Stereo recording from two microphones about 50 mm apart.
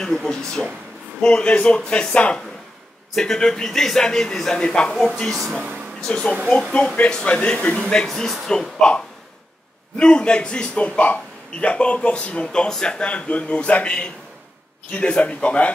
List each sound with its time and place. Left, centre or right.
0.0 s a man's voice: centre
3.2 s speech: centre
4.9 s speech: centre
6.0 s speech: centre
6.4 s speech: centre
7.0 s a man's voice: centre